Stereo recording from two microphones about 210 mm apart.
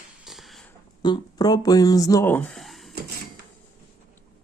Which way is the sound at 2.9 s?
50° right (ahead or behind).